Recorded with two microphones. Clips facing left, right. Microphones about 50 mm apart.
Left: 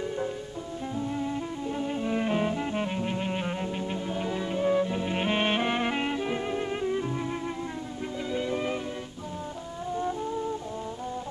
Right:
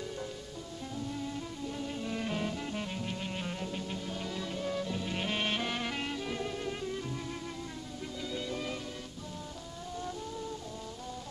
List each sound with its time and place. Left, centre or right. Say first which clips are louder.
0.9 s music: left 7 dB; left
8.3 s music: left 8 dB; left